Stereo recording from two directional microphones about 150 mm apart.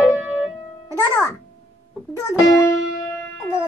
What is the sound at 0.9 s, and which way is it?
Speech, 20° left (ahead or behind).